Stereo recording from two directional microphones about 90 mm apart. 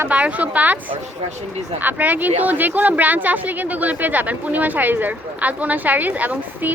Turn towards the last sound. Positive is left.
turn(degrees=-15)  # may be behind; listen again after turning